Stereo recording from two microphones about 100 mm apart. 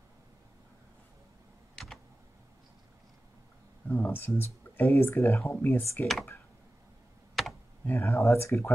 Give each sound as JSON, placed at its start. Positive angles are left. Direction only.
{"t": 3.8, "sound": "speech", "side_deg": 20}
{"t": 7.4, "sound": "computer keyboard", "side_deg": 0}
{"t": 7.8, "sound": "speech", "side_deg": 25}